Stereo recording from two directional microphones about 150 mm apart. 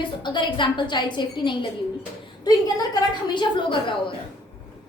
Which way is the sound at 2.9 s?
30° left (ahead or behind).